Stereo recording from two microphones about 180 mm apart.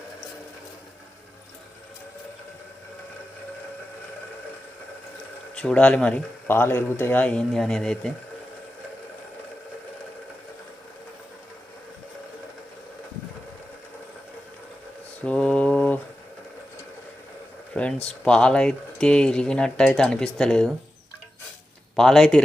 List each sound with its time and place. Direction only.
5.5 s speech: 5° left (ahead or behind)
15.2 s a sound: 5° left (ahead or behind)
17.7 s speech: 5° left (ahead or behind)
21.9 s speech: centre (ahead or behind)